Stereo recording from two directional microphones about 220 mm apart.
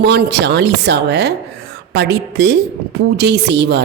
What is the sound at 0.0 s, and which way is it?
A woman's voice, 50° right (ahead or behind).